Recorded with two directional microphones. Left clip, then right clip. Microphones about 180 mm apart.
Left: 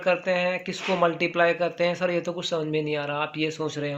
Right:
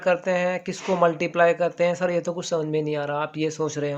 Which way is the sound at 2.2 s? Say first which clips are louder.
Right 2 dB; 55° right (ahead or behind).